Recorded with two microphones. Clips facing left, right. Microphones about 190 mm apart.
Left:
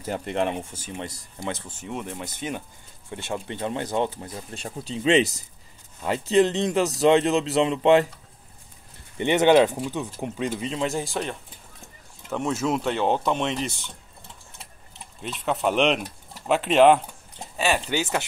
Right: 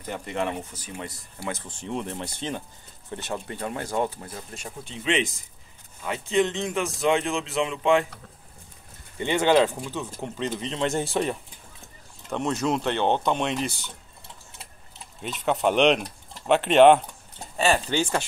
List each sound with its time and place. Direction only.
0.1 s speech: 35° left (ahead or behind)
1.7 s speech: 5° left (ahead or behind)
3.3 s speech: 20° left (ahead or behind)
4.8 s speech: 35° left (ahead or behind)
9.2 s speech: 20° left (ahead or behind); by 11.1 s 5° left (ahead or behind)
12.3 s speech: centre (ahead or behind)
15.2 s speech: centre (ahead or behind)